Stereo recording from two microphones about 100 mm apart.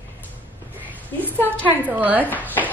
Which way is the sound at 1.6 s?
15° right (ahead or behind).